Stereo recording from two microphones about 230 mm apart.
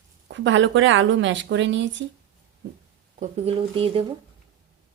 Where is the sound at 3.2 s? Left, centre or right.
Right.